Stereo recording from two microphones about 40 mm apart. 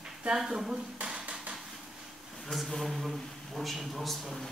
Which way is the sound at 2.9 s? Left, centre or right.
Centre.